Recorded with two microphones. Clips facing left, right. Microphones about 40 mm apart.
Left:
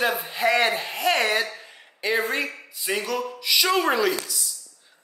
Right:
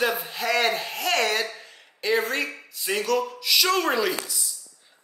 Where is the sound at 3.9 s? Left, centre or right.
Centre.